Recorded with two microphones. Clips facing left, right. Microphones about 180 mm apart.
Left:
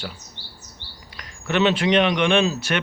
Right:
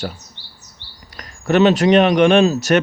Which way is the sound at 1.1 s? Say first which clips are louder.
Right 7 dB; 40° right (ahead or behind).